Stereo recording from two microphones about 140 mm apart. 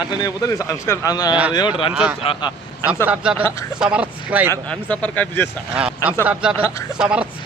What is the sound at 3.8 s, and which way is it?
Speech, 10° right (ahead or behind).